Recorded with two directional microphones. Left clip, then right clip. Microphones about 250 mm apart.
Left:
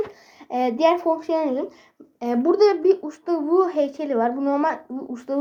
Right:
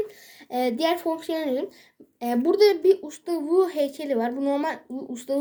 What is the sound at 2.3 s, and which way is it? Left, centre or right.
A woman's voice, right.